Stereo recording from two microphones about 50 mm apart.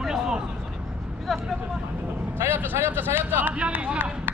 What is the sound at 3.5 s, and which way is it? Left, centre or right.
Speech, right.